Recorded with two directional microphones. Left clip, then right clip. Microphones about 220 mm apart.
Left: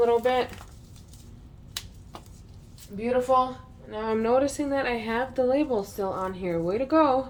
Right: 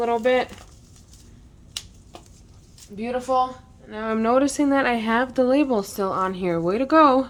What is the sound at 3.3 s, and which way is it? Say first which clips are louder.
A woman's voice: right 1 dB; 35° right (ahead or behind).